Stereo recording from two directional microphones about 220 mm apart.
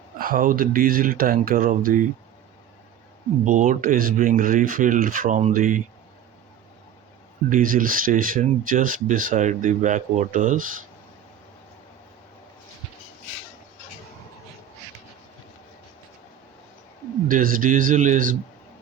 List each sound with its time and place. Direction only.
0.2 s speech: 40° right (ahead or behind)
3.4 s speech: 35° right (ahead or behind)
7.5 s speech: 40° right (ahead or behind)
17.2 s speech: 40° right (ahead or behind)